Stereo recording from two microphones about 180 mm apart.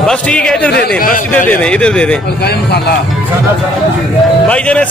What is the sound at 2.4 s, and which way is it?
Speech, 65° left (ahead or behind).